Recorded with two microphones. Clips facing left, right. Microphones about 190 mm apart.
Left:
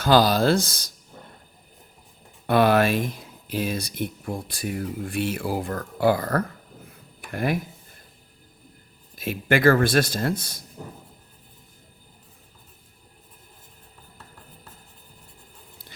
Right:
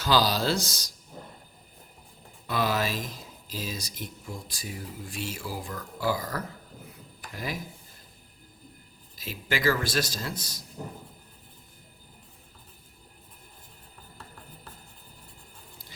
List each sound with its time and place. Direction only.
0.0 s speech: 55° left (ahead or behind)
2.5 s speech: 60° left (ahead or behind)
9.1 s speech: 55° left (ahead or behind)